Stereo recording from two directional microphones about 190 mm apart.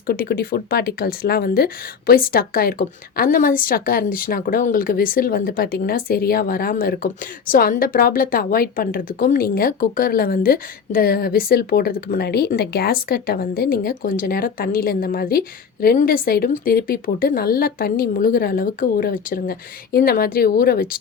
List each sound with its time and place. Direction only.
0.1 s speech: 50° left (ahead or behind)